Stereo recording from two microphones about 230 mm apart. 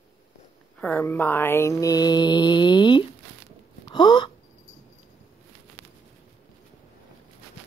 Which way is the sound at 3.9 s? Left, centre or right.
Centre.